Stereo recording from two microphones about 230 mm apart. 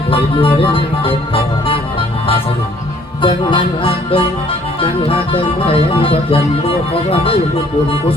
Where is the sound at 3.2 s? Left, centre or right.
Left.